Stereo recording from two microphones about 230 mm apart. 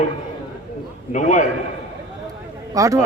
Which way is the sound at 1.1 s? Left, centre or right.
Left.